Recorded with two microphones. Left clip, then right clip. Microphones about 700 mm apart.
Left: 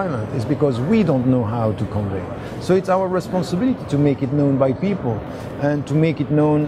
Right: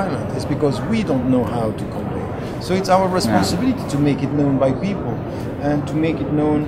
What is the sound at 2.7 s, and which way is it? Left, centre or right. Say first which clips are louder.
A man's voice: right 1 dB; left.